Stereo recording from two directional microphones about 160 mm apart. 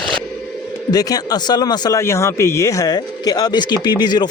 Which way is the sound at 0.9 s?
25° left (ahead or behind).